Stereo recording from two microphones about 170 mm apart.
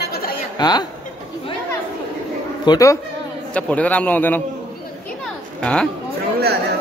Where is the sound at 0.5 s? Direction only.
25° left (ahead or behind).